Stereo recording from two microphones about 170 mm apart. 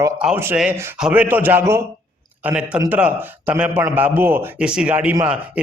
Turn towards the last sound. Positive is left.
turn(degrees=-10)  # may be behind; listen again after turning